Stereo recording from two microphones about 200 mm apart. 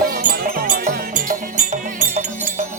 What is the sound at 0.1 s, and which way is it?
Music, 45° right (ahead or behind).